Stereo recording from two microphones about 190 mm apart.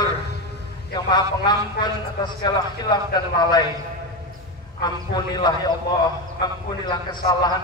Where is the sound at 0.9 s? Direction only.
20° left (ahead or behind).